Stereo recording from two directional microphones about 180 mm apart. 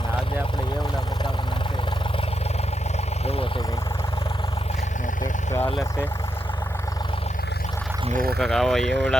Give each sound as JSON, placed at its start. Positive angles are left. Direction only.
{"t": 5.5, "sound": "vehicle", "side_deg": 10}
{"t": 8.1, "sound": "speech", "side_deg": -55}
{"t": 8.4, "sound": "speech", "side_deg": 0}